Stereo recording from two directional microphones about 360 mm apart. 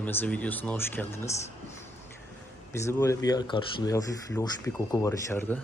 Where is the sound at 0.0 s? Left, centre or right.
Centre.